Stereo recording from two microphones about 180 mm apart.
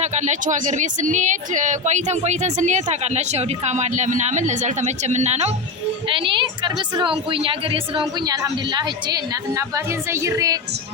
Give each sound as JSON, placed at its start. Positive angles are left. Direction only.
{"t": 0.0, "sound": "a woman's voice", "side_deg": -40}